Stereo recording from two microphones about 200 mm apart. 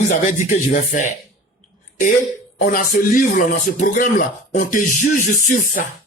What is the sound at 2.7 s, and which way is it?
Speech, 40° left (ahead or behind).